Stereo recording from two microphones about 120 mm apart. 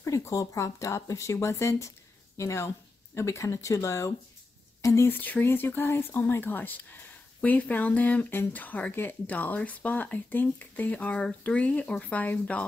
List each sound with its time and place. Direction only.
0.0 s speech: 25° left (ahead or behind)